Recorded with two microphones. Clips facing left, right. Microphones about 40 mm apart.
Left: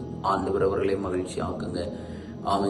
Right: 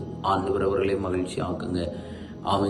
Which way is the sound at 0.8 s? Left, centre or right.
Right.